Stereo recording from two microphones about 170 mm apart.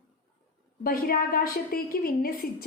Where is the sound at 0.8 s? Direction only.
60° left (ahead or behind).